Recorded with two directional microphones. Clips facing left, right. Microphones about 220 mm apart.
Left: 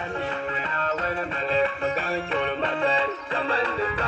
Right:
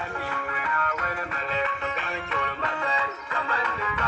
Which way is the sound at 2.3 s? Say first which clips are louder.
Left 5 dB; 30° left (ahead or behind).